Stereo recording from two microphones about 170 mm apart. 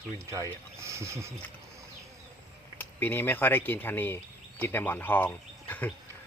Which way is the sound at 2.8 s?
10° left (ahead or behind).